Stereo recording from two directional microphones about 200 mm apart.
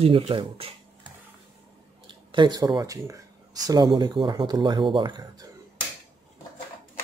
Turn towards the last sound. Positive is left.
turn(degrees=-20)  # may be behind; listen again after turning